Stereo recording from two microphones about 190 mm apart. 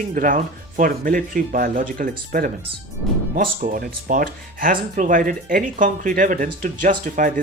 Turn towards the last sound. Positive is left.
turn(degrees=-45)  # may be behind; listen again after turning